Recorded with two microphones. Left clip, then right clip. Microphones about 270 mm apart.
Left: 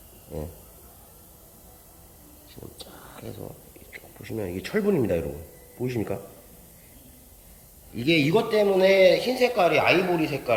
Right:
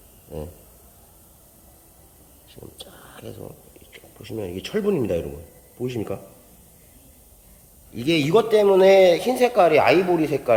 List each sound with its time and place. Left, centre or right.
2.7 s a sound: centre
4.2 s a man's voice: centre
7.9 s a man's voice: centre